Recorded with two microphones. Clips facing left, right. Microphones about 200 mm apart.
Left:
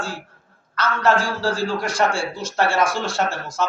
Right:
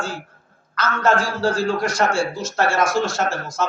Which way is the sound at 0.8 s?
45° right (ahead or behind).